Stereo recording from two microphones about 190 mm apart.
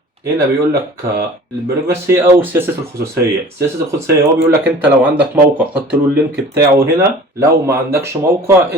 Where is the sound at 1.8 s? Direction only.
10° right (ahead or behind).